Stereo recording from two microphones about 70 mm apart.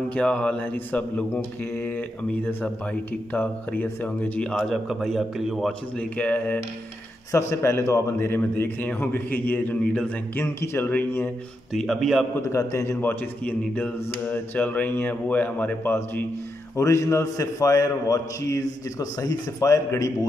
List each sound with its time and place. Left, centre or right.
0.1 s speech: centre
1.3 s speech: left
4.4 s speech: centre
4.7 s a man's voice: centre
5.7 s speech: centre
7.3 s a man's voice: left
10.4 s a man's voice: left
11.7 s a man's voice: centre
12.4 s a man's voice: left
13.0 s speech: left
16.7 s a man's voice: left